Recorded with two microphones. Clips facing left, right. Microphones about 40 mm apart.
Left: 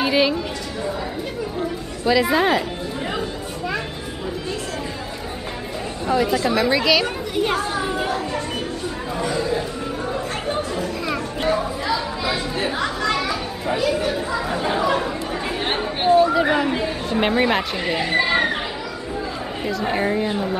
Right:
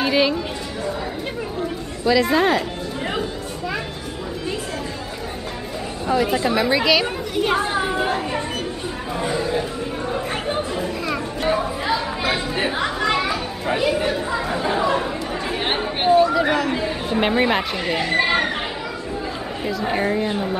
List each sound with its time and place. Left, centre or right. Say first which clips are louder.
0.0 s speech: even; centre
2.0 s speech: even; centre
6.1 s a woman's voice: even; centre
7.5 s speech: right 2 dB; centre
9.2 s chatter: even; centre
14.8 s chatter: even; centre
16.3 s speech: left 1 dB; centre
17.1 s speech: even; centre
19.6 s speech: even; centre